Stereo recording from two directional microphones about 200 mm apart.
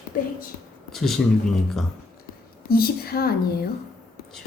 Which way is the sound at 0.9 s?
Centre (ahead or behind).